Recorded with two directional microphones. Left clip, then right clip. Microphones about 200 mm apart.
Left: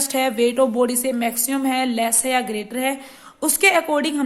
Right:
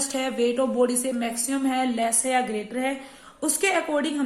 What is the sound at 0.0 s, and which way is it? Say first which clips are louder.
A woman's voice: left 6 dB; 45° left (ahead or behind).